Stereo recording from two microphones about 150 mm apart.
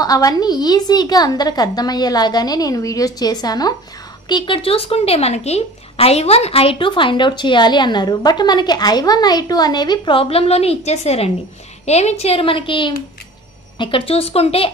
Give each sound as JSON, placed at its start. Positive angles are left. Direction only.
{"t": 0.0, "sound": "a woman's voice", "side_deg": 25}